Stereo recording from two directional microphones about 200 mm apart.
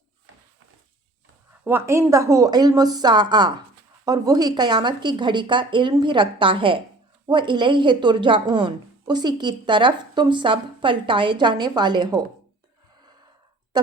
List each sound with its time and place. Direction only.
0.3 s walk: 80° right
1.6 s a woman's voice: 10° right (ahead or behind)
13.7 s a sound: 20° right (ahead or behind)